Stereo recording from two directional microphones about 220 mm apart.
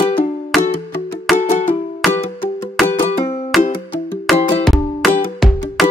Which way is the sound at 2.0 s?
Centre (ahead or behind).